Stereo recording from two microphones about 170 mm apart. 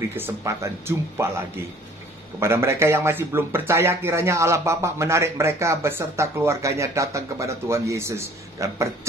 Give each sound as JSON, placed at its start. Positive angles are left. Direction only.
{"t": 0.1, "sound": "speech", "side_deg": -15}
{"t": 2.4, "sound": "speech", "side_deg": -15}